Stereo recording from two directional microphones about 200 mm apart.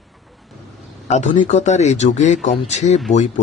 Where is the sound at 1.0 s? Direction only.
35° left (ahead or behind).